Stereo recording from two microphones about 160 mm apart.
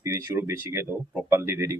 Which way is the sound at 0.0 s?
15° right (ahead or behind).